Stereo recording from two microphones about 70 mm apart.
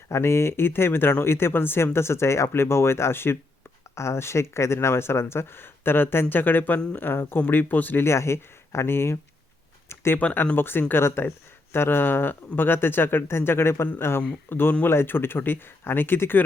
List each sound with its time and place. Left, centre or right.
0.1 s speech: left
8.0 s speech: left
9.9 s a sound: left
10.2 s speech: left